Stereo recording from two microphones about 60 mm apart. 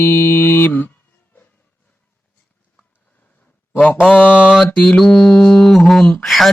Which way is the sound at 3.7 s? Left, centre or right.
Left.